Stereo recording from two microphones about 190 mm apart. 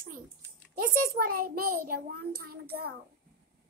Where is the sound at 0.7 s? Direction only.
50° right (ahead or behind).